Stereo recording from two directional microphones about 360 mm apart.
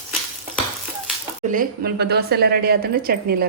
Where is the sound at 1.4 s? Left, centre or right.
Right.